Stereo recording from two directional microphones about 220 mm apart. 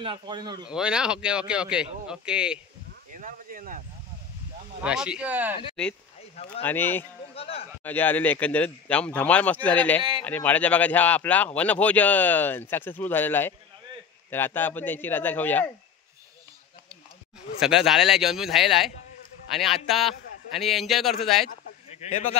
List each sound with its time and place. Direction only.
0.0 s a man's voice: 20° right (ahead or behind)
0.7 s speech: 5° right (ahead or behind)
3.1 s a sound: 40° right (ahead or behind)
4.8 s speech: 5° right (ahead or behind)
6.6 s speech: 10° left (ahead or behind)
7.3 s a man's voice: 25° left (ahead or behind)
7.8 s speech: 10° left (ahead or behind)
17.6 s speech: centre (ahead or behind)